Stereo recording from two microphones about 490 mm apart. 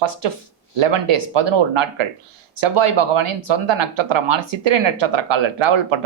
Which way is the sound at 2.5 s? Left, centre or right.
Right.